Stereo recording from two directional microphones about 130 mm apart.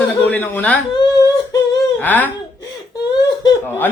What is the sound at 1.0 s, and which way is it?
Whimper, 30° left (ahead or behind).